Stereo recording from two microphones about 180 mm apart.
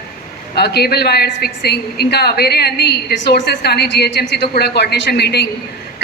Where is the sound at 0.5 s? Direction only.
65° left (ahead or behind).